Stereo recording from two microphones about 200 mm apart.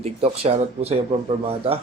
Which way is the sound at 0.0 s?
30° right (ahead or behind).